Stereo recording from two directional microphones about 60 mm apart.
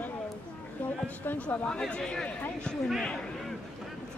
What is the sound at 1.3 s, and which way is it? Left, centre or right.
Speech, left.